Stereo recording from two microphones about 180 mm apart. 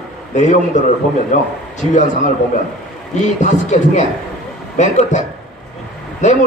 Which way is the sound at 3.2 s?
40° left (ahead or behind).